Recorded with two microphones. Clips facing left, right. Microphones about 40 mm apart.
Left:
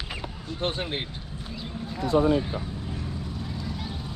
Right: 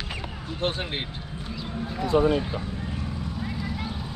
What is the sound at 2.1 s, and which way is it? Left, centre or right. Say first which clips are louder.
Speech: even; right.